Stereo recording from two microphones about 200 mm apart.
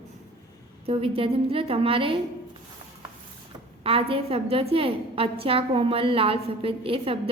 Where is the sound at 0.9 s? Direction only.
30° right (ahead or behind).